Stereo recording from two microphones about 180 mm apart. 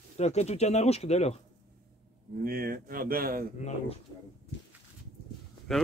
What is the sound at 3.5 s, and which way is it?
Speech, 40° left (ahead or behind).